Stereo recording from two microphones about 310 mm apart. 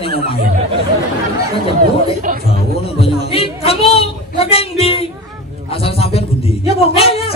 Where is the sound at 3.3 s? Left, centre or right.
Centre.